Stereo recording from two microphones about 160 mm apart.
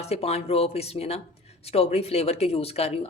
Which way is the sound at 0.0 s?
40° left (ahead or behind).